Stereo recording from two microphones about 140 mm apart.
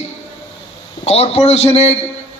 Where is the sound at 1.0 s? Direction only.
45° left (ahead or behind).